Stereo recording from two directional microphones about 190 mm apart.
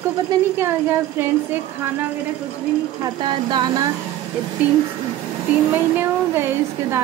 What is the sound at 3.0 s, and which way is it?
Speech, 25° right (ahead or behind).